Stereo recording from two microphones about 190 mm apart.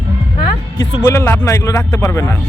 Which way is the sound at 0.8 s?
15° left (ahead or behind).